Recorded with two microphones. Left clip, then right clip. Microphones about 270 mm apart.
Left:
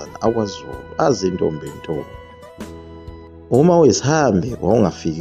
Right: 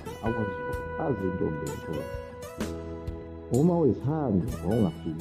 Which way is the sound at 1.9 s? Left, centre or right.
Left.